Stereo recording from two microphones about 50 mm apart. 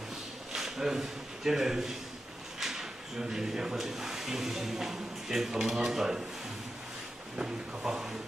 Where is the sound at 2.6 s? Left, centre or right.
Centre.